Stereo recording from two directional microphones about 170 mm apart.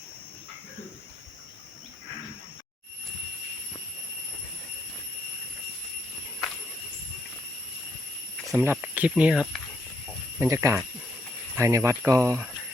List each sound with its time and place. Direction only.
8.5 s speech: 10° right (ahead or behind)
10.3 s speech: 15° right (ahead or behind)